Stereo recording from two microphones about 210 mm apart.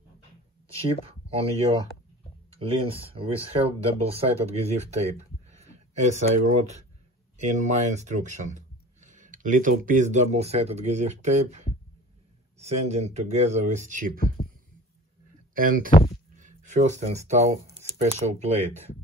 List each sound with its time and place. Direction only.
0.7 s speech: 30° right (ahead or behind)
2.5 s speech: 25° right (ahead or behind)
15.5 s speech: 40° right (ahead or behind)